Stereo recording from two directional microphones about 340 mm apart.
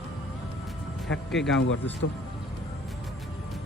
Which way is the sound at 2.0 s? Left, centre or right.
Left.